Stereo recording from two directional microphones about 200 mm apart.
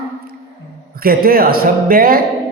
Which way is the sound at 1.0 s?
45° right (ahead or behind).